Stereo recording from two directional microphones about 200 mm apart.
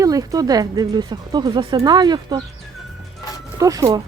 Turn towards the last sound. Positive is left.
turn(degrees=-20)  # may be behind; listen again after turning